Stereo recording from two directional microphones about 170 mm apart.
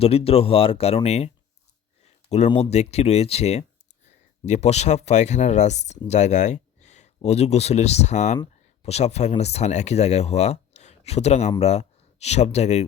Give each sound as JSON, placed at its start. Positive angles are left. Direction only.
{"t": 0.0, "sound": "speech", "side_deg": 35}
{"t": 2.5, "sound": "speech", "side_deg": 40}